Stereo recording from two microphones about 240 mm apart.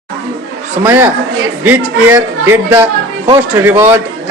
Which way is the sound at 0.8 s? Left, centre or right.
Centre.